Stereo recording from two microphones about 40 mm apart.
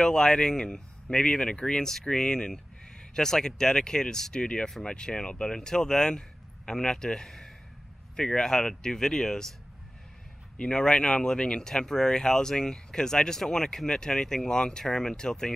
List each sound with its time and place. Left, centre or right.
0.0 s speech: centre
10.6 s speech: left
11.7 s speech: centre